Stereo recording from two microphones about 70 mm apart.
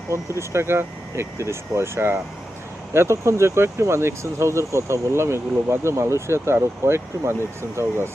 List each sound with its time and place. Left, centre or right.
0.1 s speech: right